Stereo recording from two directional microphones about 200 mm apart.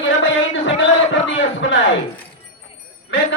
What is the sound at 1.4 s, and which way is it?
Speech, 65° left (ahead or behind).